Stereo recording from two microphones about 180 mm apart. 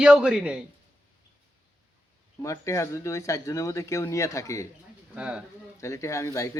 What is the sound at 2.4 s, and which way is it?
Speech, 15° left (ahead or behind).